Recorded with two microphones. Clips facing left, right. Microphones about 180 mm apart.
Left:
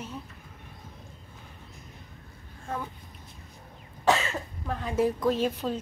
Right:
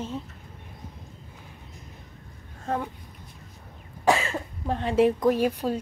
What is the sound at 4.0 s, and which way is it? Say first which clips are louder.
Cough: right 2 dB; 10° right (ahead or behind).